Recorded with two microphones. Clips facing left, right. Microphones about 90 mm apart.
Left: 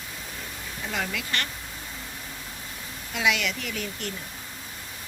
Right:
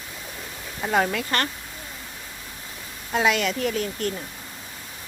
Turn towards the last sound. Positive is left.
turn(degrees=-40)  # may be behind; listen again after turning